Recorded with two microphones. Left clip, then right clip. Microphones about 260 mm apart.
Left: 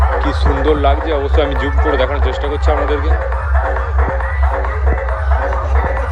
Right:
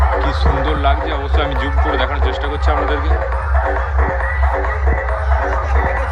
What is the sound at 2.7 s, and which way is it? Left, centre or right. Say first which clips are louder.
Music: left 1 dB; right.